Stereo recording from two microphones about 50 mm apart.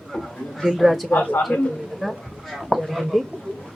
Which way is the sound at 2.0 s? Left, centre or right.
Centre.